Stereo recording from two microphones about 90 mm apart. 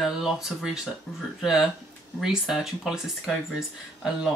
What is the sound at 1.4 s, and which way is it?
Speech, 5° right (ahead or behind).